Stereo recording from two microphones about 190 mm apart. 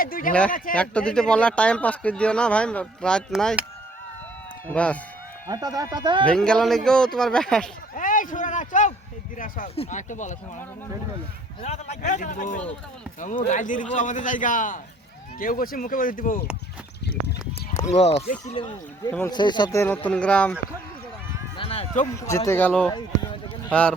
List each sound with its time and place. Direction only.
0.0 s a man's voice: 45° left (ahead or behind)
0.7 s speech: 5° left (ahead or behind)
4.7 s speech: 5° left (ahead or behind)
5.5 s speech: 20° right (ahead or behind)
6.2 s speech: 5° left (ahead or behind)
7.9 s speech: 45° left (ahead or behind)
11.6 s a man's voice: 35° left (ahead or behind)
17.9 s speech: 35° left (ahead or behind); by 20.6 s 5° left (ahead or behind)
21.6 s a sound: 30° left (ahead or behind)
22.4 s speech: 10° left (ahead or behind)
22.9 s speech: 25° left (ahead or behind)